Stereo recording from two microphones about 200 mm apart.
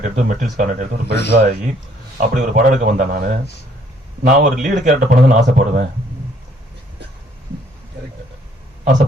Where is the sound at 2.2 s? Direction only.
45° right (ahead or behind).